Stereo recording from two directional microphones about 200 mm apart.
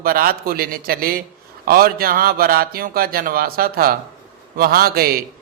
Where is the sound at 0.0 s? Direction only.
50° right (ahead or behind).